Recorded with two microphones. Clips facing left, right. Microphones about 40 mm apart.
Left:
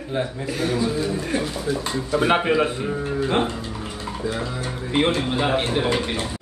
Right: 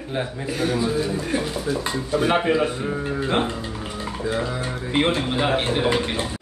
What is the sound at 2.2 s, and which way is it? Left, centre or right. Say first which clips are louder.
Speech: left 1 dB; centre.